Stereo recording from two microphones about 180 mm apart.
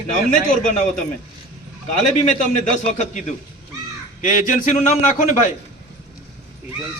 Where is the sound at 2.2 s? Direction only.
40° left (ahead or behind).